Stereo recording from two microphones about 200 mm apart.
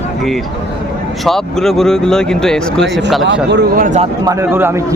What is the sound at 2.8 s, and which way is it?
Speech, 60° right (ahead or behind).